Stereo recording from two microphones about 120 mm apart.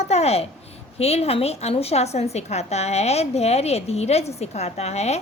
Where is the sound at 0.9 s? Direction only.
60° left (ahead or behind).